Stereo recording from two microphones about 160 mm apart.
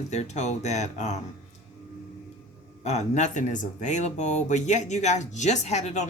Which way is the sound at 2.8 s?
45° left (ahead or behind).